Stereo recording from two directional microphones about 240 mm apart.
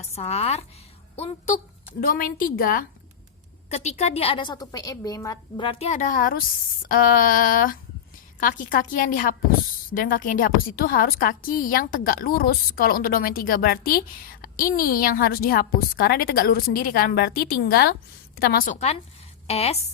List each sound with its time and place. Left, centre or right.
0.0 s a woman's voice: left